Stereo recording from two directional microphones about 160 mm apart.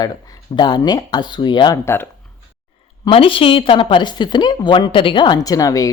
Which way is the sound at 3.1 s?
35° left (ahead or behind).